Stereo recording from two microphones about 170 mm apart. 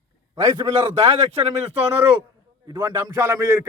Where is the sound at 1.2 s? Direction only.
35° right (ahead or behind).